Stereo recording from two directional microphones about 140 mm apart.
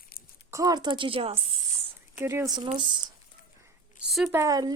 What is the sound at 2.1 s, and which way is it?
Speech, 20° right (ahead or behind).